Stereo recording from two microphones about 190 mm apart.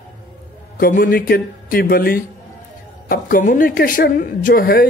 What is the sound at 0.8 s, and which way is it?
A woman's voice, 50° left (ahead or behind).